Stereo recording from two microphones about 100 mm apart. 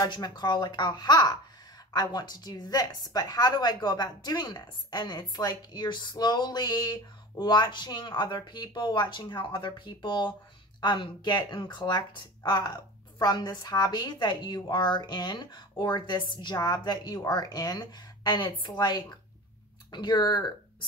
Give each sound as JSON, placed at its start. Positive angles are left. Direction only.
{"t": 0.0, "sound": "a woman's voice", "side_deg": 45}